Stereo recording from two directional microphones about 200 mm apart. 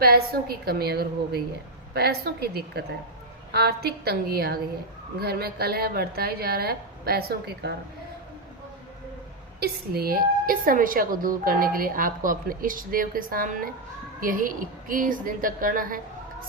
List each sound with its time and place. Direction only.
0.0 s a woman's voice: 50° right (ahead or behind)
9.6 s a woman's voice: 50° right (ahead or behind)